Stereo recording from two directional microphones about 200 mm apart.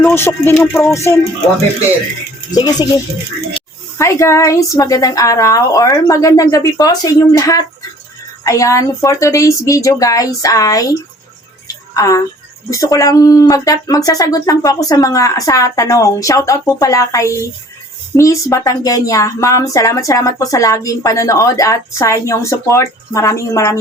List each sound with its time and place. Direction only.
0.0 s speech: 10° left (ahead or behind)
2.5 s speech: 20° left (ahead or behind)
11.7 s music: 15° left (ahead or behind)
12.7 s speech: 15° left (ahead or behind)